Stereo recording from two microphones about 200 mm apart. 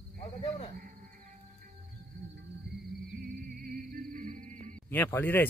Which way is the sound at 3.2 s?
45° right (ahead or behind).